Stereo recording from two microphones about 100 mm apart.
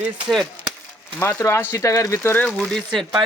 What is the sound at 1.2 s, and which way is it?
Speech, 25° left (ahead or behind).